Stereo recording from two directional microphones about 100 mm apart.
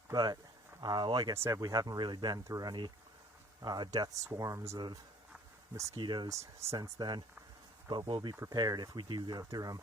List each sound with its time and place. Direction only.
0.1 s speech: 45° right (ahead or behind)
1.5 s speech: 35° right (ahead or behind)
6.0 s speech: 50° right (ahead or behind)
6.2 s speech: 30° right (ahead or behind)
6.7 s speech: 45° right (ahead or behind)
8.4 s speech: 40° right (ahead or behind)
9.4 s speech: 35° right (ahead or behind)